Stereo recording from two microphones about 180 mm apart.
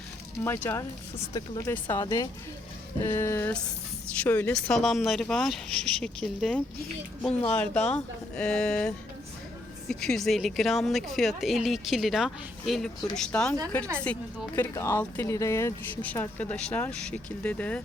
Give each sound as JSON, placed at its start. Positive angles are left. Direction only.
{"t": 0.4, "sound": "a woman's voice", "side_deg": 15}
{"t": 9.9, "sound": "a woman's voice", "side_deg": 5}